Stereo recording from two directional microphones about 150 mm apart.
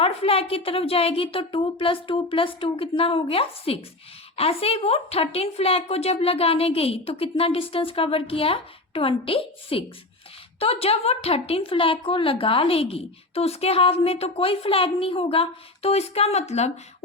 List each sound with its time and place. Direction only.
0.0 s speech: 40° left (ahead or behind)